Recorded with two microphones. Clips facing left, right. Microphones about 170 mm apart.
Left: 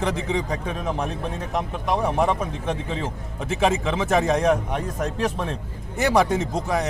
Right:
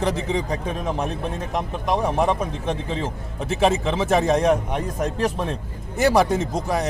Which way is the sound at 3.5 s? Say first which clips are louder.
Right 2 dB; 30° right (ahead or behind).